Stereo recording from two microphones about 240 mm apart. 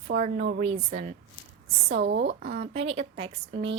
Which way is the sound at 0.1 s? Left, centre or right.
Right.